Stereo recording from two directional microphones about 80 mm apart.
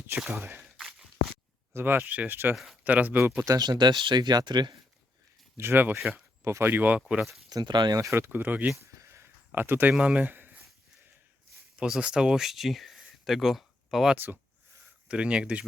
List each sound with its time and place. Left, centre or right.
0.3 s speech: right
0.6 s a sound: centre
1.7 s speech: right
3.4 s speech: right
3.7 s speech: right
5.5 s speech: right
7.5 s speech: right
7.9 s speech: right; by 8.7 s centre
8.9 s a sound: right
9.5 s speech: right
10.0 s a sound: centre
11.8 s speech: centre